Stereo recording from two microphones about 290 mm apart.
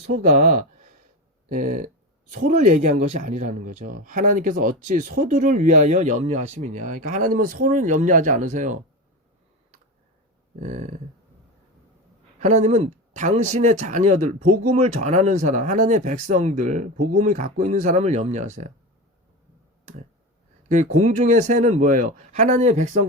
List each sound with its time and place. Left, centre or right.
0.1 s speech: right
10.6 s speech: right
12.4 s speech: right
20.7 s speech: right